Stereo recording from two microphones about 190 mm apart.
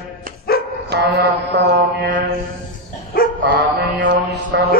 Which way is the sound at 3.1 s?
50° left (ahead or behind).